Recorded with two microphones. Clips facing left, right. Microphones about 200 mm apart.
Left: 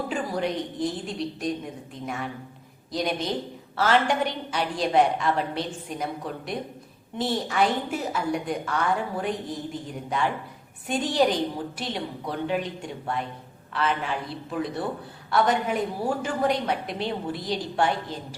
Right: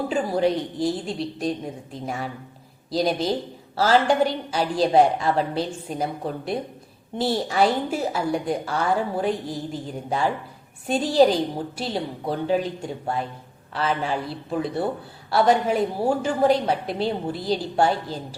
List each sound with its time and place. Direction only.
0.1 s a woman's voice: 30° right (ahead or behind)
15.3 s a woman's voice: 35° right (ahead or behind)